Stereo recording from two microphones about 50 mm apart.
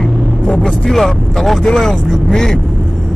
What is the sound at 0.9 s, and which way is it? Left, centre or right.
Speech, centre.